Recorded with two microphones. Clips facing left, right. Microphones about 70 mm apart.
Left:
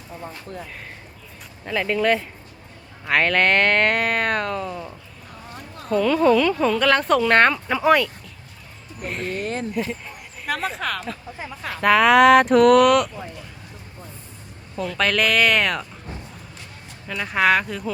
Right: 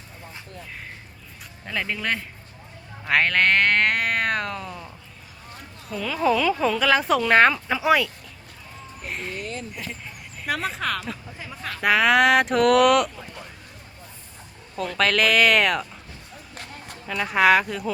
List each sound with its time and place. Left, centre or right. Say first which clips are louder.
1.6 s speech: left 7 dB; centre
5.9 s speech: left 6 dB; centre
9.3 s a sound: left 6 dB; left
10.4 s speech: left 1 dB; centre
14.8 s speech: even; centre
17.1 s speech: right 1 dB; centre